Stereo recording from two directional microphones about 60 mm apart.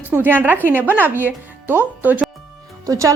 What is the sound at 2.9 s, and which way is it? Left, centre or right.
Speech, right.